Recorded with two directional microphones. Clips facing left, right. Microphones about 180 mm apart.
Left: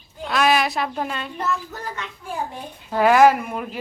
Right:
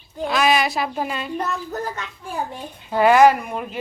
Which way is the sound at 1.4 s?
40° right (ahead or behind).